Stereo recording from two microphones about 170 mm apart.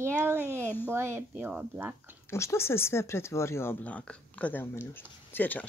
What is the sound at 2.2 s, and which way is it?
Speech, 15° left (ahead or behind).